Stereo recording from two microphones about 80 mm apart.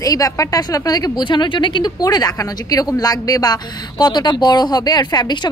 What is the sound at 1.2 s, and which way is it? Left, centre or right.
Speech, left.